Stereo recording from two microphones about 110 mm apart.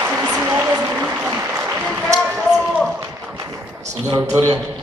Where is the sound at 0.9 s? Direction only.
15° right (ahead or behind).